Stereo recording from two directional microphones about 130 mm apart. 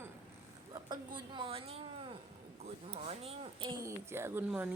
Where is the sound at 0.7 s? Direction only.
35° right (ahead or behind); by 3.7 s 50° right (ahead or behind).